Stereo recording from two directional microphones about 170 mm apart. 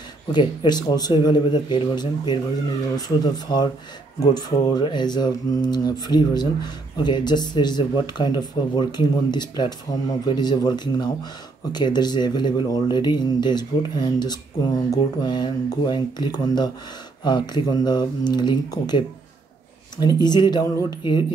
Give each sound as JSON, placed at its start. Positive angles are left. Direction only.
{"t": 0.3, "sound": "speech", "side_deg": 25}